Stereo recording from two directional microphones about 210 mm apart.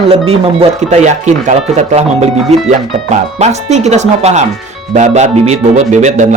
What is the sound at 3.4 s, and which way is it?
Speech, 30° right (ahead or behind).